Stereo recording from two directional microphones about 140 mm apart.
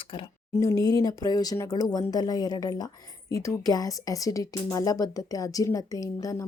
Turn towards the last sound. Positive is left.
turn(degrees=25)  # may be behind; listen again after turning